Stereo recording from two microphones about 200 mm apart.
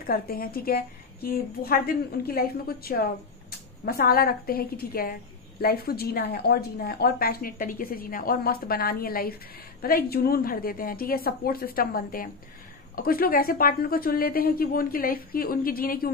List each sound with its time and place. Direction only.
0.0 s speech: 45° left (ahead or behind)